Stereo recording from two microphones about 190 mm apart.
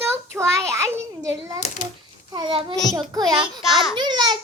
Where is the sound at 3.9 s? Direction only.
25° right (ahead or behind).